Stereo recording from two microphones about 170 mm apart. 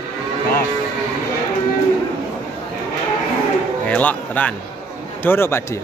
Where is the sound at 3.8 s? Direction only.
10° left (ahead or behind).